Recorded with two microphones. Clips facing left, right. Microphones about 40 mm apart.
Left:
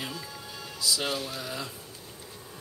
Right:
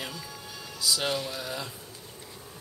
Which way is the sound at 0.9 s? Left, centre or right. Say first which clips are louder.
Right 2 dB; centre.